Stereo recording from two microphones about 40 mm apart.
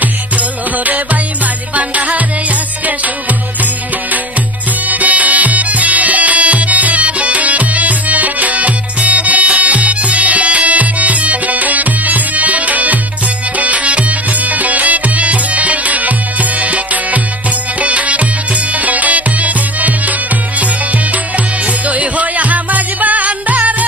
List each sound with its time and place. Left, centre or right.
0.9 s music: right
4.9 s music: right